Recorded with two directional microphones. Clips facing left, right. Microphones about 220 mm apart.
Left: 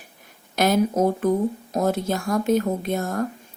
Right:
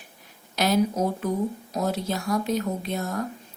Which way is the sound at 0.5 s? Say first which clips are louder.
Left 3 dB; 50° left (ahead or behind).